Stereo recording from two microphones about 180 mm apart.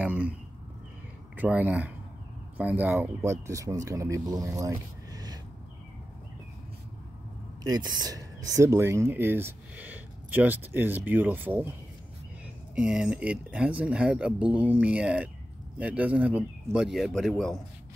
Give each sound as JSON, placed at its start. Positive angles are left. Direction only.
{"t": 0.0, "sound": "a sound", "side_deg": -10}
{"t": 1.3, "sound": "speech", "side_deg": -10}
{"t": 7.6, "sound": "speech", "side_deg": -20}
{"t": 12.7, "sound": "speech", "side_deg": -5}